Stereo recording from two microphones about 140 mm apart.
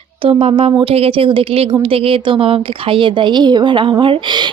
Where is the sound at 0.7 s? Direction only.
45° right (ahead or behind).